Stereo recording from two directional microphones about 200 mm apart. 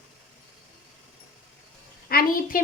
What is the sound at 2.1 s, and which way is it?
Speech, 45° left (ahead or behind).